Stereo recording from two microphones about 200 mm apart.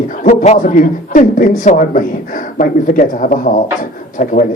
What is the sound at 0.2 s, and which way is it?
A man's voice, 35° left (ahead or behind).